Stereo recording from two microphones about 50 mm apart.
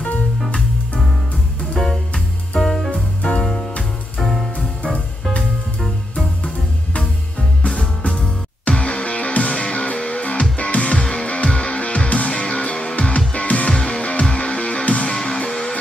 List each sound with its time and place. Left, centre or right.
1.8 s music: centre
4.2 s music: centre
4.8 s music: centre
8.6 s music: left
13.7 s music: centre